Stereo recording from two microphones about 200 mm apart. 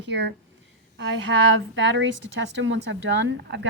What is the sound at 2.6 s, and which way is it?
A woman's voice, 65° right (ahead or behind).